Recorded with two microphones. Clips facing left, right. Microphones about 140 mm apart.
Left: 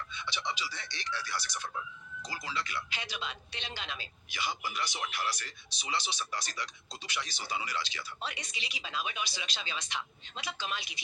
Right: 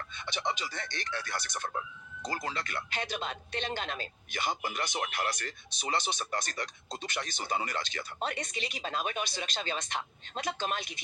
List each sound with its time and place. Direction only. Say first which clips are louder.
0.1 s speech: right 5 dB; 50° right (ahead or behind)